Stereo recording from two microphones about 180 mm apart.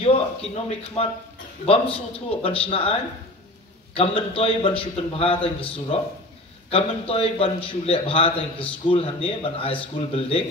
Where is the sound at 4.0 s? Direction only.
30° left (ahead or behind).